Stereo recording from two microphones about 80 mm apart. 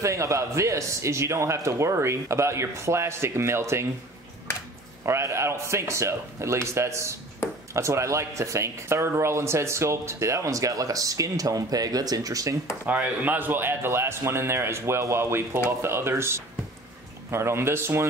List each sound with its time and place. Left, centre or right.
0.0 s speech: right
5.0 s speech: right
12.8 s speech: centre